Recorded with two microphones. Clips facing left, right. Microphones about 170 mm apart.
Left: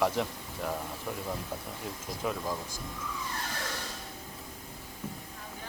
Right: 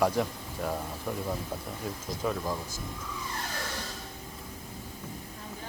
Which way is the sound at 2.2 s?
5° left (ahead or behind).